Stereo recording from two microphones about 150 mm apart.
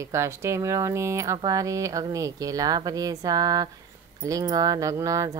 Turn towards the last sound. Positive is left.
turn(degrees=-20)  # may be behind; listen again after turning